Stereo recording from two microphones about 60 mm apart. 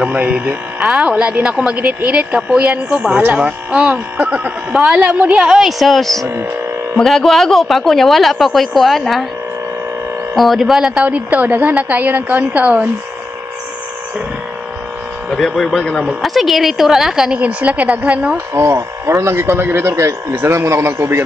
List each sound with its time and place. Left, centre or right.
0.0 s speech: right
5.6 s speech: centre
10.3 s speech: centre
11.1 s speech: right
15.2 s speech: centre
16.1 s speech: centre
17.4 s speech: right
18.5 s speech: right
19.9 s speech: right
20.3 s speech: right